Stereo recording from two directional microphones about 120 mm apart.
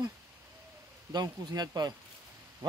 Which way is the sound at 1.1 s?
35° right (ahead or behind).